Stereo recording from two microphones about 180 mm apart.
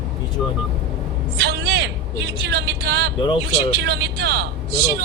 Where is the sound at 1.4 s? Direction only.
65° right (ahead or behind).